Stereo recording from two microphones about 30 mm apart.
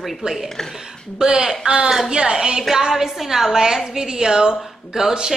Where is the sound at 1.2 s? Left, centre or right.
Centre.